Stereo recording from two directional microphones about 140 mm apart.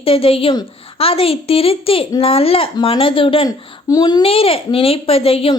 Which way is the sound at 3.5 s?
30° left (ahead or behind).